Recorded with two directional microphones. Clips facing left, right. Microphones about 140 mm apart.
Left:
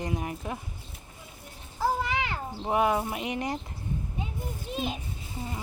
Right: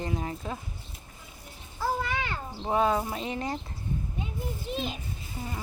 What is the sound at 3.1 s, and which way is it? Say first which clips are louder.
Speech: left 1 dB; 15° left (ahead or behind).